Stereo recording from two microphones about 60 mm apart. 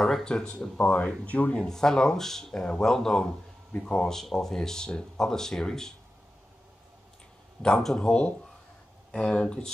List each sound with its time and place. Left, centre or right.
0.0 s speech: centre
1.6 s speech: centre
7.6 s speech: centre